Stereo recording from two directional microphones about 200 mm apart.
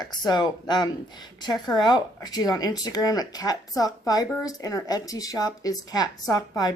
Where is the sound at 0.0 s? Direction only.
20° left (ahead or behind).